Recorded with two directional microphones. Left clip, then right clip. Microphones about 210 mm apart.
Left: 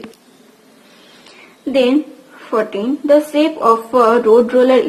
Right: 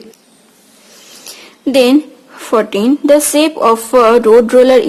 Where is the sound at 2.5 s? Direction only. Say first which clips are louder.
Right 6 dB; 30° right (ahead or behind).